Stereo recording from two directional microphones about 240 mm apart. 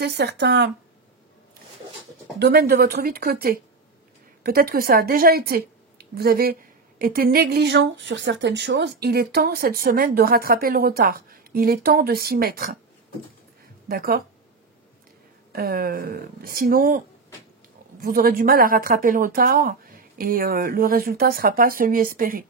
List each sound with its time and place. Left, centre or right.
0.0 s speech: right
2.3 s a woman's voice: right
13.8 s a woman's voice: right
15.5 s a woman's voice: right
18.0 s a woman's voice: right